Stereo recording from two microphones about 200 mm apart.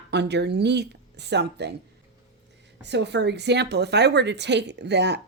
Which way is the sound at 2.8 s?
60° right (ahead or behind).